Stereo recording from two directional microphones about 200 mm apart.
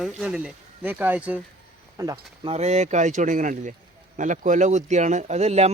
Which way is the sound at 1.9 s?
15° right (ahead or behind).